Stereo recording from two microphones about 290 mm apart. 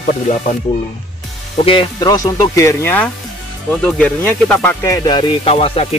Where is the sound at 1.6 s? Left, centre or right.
Centre.